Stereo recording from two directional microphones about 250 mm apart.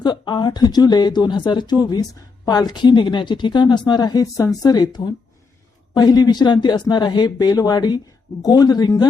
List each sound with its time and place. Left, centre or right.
0.0 s speech: centre